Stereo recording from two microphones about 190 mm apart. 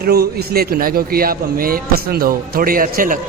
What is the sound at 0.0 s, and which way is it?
A man's voice, 55° right (ahead or behind).